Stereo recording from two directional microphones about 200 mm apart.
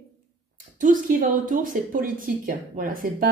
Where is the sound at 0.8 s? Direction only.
45° right (ahead or behind).